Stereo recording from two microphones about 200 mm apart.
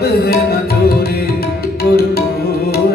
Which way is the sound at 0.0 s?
50° left (ahead or behind).